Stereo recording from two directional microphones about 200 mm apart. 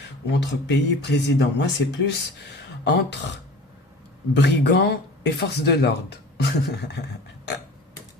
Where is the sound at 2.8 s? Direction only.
60° left (ahead or behind).